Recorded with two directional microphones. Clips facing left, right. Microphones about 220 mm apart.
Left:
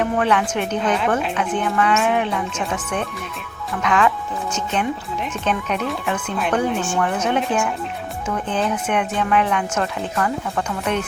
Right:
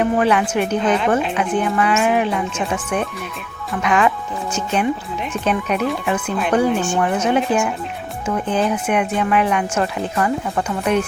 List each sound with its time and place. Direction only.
0.0 s speech: 10° right (ahead or behind)